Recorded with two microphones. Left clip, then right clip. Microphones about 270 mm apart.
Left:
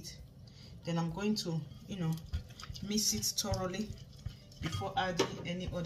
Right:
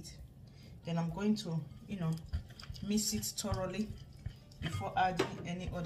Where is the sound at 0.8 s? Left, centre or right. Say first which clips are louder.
Left 1 dB; centre.